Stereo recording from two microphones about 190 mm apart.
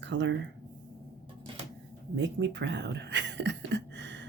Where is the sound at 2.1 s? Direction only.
70° right (ahead or behind).